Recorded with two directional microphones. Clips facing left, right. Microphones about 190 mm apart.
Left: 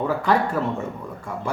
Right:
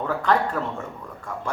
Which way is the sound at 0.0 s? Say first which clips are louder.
Left 2 dB; 10° left (ahead or behind).